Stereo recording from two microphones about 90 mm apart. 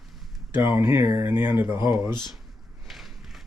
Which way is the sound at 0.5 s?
30° right (ahead or behind).